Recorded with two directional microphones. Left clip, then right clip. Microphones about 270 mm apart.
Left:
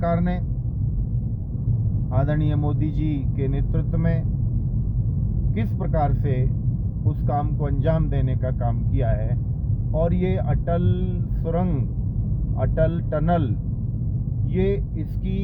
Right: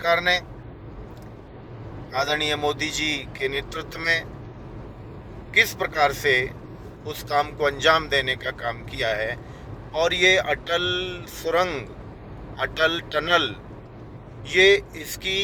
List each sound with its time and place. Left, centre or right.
2.2 s speech: centre
5.5 s speech: centre
14.5 s speech: centre